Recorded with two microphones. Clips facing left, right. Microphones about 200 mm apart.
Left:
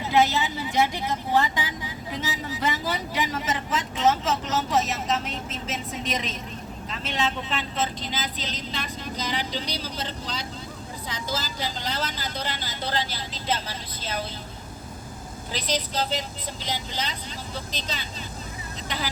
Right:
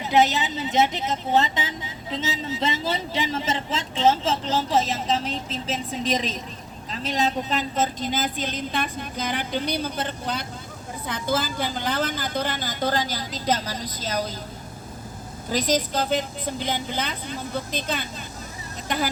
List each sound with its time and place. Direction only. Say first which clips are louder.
0.0 s a woman's voice: right 1 dB; 20° right (ahead or behind); by 14.3 s 40° right (ahead or behind)
15.5 s a woman's voice: right 5 dB; 45° right (ahead or behind)